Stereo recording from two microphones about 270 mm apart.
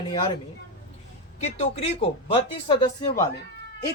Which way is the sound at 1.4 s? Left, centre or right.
Left.